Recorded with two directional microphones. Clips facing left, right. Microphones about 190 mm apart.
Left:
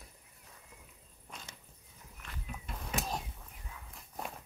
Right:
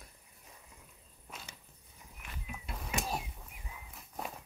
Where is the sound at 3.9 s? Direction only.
Centre (ahead or behind).